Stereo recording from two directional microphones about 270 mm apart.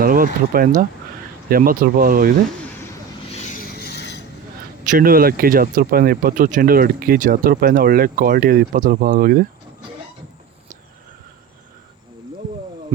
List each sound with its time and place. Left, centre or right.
0.0 s speech: right
3.3 s a sound: left
4.9 s speech: right